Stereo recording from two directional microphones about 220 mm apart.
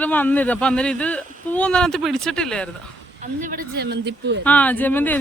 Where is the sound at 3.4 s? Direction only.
40° right (ahead or behind).